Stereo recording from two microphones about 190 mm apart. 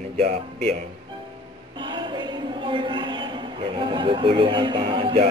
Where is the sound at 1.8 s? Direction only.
25° right (ahead or behind).